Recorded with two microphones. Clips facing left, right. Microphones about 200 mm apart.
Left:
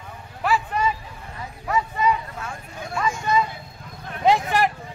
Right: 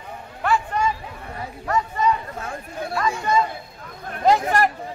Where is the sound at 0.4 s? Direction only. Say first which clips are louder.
Right 1 dB; 5° left (ahead or behind).